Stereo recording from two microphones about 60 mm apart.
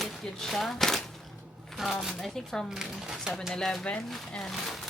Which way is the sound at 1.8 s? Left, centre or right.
Centre.